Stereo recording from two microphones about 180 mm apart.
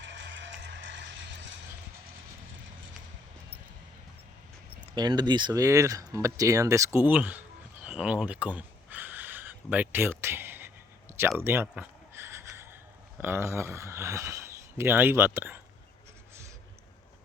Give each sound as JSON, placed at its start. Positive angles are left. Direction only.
{"t": 0.0, "sound": "music", "side_deg": -80}
{"t": 4.9, "sound": "speech", "side_deg": -25}
{"t": 11.3, "sound": "a sound", "side_deg": -15}
{"t": 13.1, "sound": "speech", "side_deg": -10}